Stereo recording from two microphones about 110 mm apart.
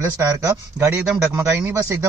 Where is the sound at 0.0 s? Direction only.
30° right (ahead or behind).